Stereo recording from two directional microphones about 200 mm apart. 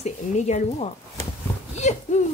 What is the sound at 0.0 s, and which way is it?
Speech, 35° left (ahead or behind).